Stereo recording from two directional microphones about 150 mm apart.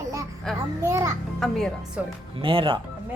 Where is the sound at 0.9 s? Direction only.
20° right (ahead or behind).